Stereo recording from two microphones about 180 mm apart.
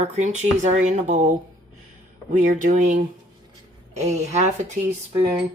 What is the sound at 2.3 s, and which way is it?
Speech, 45° right (ahead or behind).